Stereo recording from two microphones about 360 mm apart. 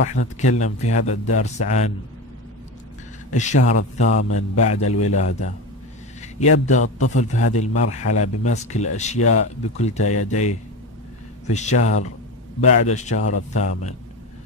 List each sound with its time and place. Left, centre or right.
0.1 s speech: centre
3.3 s speech: centre
4.7 s a man's voice: left
5.1 s speech: centre